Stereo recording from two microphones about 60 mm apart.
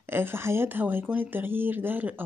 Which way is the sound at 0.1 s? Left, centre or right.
Right.